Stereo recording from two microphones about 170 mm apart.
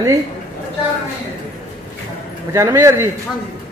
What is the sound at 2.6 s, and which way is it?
Speech, 15° right (ahead or behind).